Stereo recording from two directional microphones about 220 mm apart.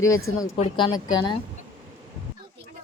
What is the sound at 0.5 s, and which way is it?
Speech, 25° left (ahead or behind).